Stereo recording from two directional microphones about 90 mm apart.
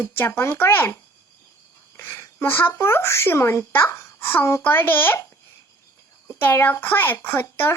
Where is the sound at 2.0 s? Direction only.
25° left (ahead or behind).